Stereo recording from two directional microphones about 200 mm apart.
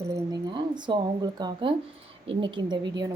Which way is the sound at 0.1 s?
25° right (ahead or behind).